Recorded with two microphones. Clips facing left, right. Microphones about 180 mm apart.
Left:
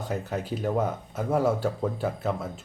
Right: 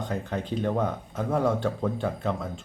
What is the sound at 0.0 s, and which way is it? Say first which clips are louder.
Speech: even; 5° left (ahead or behind).